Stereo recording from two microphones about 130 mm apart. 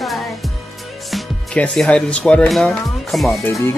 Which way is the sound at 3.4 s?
20° left (ahead or behind).